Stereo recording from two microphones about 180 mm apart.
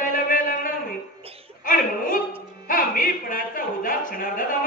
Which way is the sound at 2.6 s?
50° left (ahead or behind).